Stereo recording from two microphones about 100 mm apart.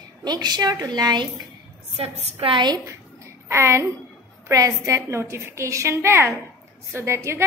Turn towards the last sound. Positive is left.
turn(degrees=-25)  # may be behind; listen again after turning